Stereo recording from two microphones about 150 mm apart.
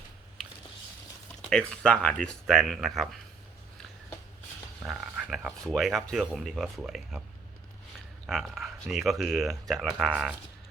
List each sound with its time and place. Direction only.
1.5 s speech: 5° left (ahead or behind)
4.8 s a sound: 5° right (ahead or behind)
5.6 s speech: centre (ahead or behind)
8.3 s speech: centre (ahead or behind)
10.1 s speech: 10° right (ahead or behind)